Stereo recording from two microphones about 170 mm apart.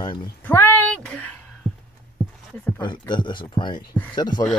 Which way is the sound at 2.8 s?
25° left (ahead or behind).